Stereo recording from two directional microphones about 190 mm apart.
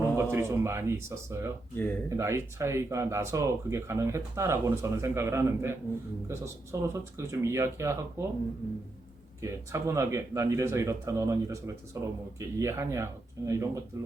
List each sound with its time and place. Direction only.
0.2 s speech: 15° right (ahead or behind)
1.7 s speech: 10° left (ahead or behind)
2.0 s speech: 15° right (ahead or behind)
9.4 s speech: 15° right (ahead or behind)